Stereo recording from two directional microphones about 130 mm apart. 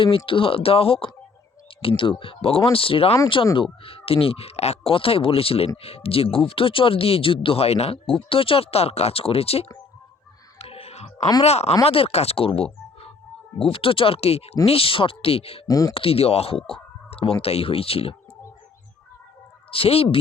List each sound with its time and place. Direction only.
0.3 s speech: 45° left (ahead or behind)
10.6 s music: 50° left (ahead or behind)
11.4 s speech: 55° left (ahead or behind)
15.6 s speech: 25° left (ahead or behind)
16.0 s speech: 50° left (ahead or behind)
19.7 s speech: 50° left (ahead or behind)